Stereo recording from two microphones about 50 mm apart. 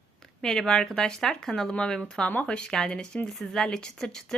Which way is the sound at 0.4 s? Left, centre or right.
Centre.